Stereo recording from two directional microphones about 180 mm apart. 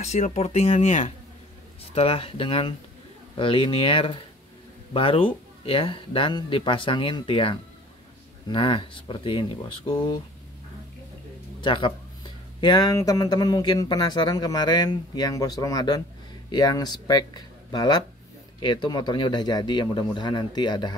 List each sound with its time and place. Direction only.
0.0 s speech: 40° left (ahead or behind)
11.6 s speech: 30° left (ahead or behind)